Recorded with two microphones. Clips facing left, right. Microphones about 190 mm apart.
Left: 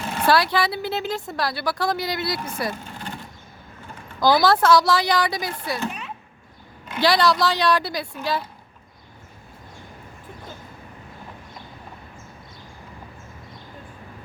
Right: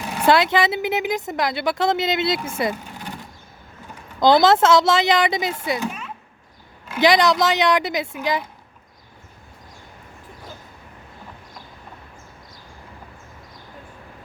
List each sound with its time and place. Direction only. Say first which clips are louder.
0.0 s speech: right 2 dB; 15° right (ahead or behind)
2.6 s vehicle: right 4 dB; 15° right (ahead or behind)
4.2 s speech: right 3 dB; 20° right (ahead or behind)
7.0 s speech: right 3 dB; 20° right (ahead or behind)